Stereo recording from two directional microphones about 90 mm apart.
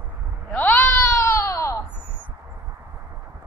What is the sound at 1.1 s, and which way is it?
Baby cry, 35° left (ahead or behind).